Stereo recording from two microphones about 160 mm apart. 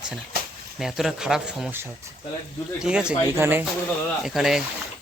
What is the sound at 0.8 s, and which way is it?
Speech, centre (ahead or behind).